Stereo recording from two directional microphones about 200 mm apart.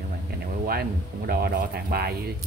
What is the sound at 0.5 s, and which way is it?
Speech, 50° right (ahead or behind).